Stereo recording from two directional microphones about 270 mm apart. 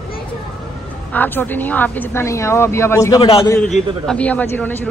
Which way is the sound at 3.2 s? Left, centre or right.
Left.